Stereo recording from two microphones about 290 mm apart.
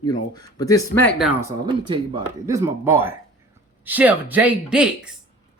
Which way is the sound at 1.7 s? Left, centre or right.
Centre.